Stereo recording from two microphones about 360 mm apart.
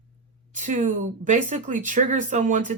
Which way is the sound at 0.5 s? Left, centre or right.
Right.